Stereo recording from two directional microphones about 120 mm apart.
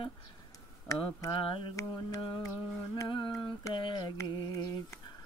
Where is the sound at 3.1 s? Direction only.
45° left (ahead or behind).